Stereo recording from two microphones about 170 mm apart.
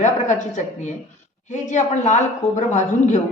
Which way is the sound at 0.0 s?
45° left (ahead or behind).